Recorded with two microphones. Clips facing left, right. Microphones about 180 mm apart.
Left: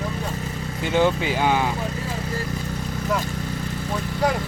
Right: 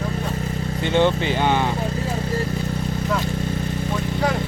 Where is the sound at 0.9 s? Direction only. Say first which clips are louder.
Right 1 dB; 5° left (ahead or behind).